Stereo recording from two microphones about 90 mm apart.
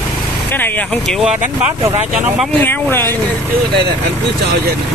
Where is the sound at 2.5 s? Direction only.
20° left (ahead or behind).